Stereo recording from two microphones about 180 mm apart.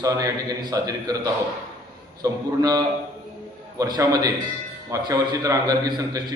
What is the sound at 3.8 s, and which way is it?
A man's voice, 20° right (ahead or behind).